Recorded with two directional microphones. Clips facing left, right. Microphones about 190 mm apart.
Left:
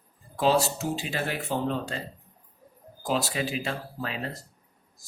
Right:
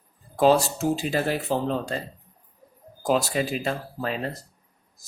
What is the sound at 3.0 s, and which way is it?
Speech, 45° right (ahead or behind).